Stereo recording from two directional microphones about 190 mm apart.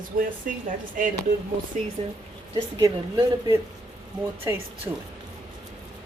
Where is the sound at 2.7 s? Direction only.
20° right (ahead or behind).